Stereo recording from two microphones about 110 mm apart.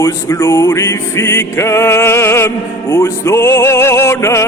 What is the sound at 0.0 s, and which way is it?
Music, 30° left (ahead or behind).